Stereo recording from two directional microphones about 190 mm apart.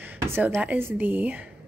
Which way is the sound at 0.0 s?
10° right (ahead or behind).